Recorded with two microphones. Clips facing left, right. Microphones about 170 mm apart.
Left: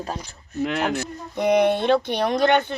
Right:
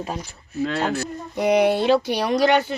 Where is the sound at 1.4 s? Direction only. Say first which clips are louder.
Right 1 dB; 10° right (ahead or behind).